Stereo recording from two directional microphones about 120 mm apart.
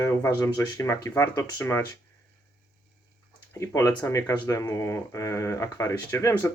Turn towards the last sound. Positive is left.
turn(degrees=25)  # may be behind; listen again after turning